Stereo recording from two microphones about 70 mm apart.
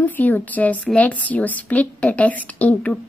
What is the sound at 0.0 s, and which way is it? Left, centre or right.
A woman's voice, left.